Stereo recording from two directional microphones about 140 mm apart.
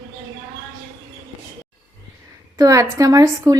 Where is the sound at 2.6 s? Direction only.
25° right (ahead or behind).